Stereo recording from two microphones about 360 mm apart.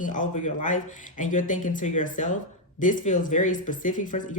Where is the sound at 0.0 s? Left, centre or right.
Left.